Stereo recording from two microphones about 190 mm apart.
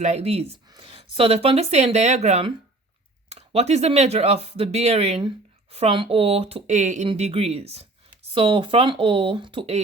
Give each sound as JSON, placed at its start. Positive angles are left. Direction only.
{"t": 0.0, "sound": "speech", "side_deg": -35}